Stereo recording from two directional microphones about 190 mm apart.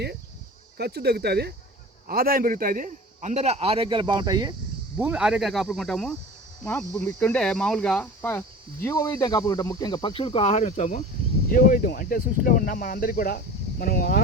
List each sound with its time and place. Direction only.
0.8 s a man's voice: 60° right (ahead or behind); by 4.5 s 20° right (ahead or behind)
4.9 s speech: 5° right (ahead or behind); by 14.2 s 50° left (ahead or behind)